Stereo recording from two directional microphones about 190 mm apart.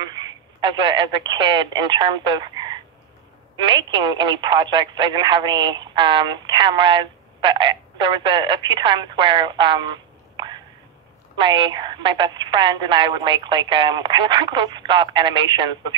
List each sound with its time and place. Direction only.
0.0 s speech: 20° right (ahead or behind)